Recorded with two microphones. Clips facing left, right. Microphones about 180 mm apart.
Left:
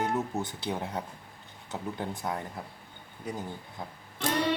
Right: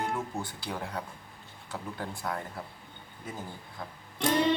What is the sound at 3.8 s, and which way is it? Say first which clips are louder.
Speech: even; 20° left (ahead or behind).